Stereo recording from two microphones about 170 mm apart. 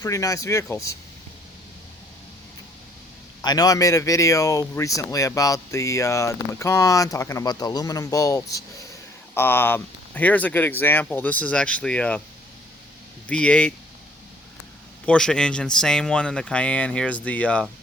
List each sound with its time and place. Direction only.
0.0 s speech: 20° left (ahead or behind)
3.4 s speech: 25° left (ahead or behind); by 12.2 s 5° left (ahead or behind)
13.2 s speech: 5° left (ahead or behind)
15.0 s speech: 5° left (ahead or behind)